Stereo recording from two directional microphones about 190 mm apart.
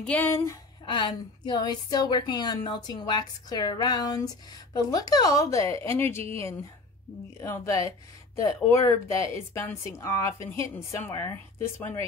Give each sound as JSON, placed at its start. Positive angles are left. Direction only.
{"t": 0.0, "sound": "speech", "side_deg": 10}
{"t": 0.8, "sound": "a woman's voice", "side_deg": 25}
{"t": 7.3, "sound": "speech", "side_deg": 15}